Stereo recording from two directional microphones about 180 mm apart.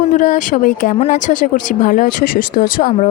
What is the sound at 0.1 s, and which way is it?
A woman's voice, 45° left (ahead or behind).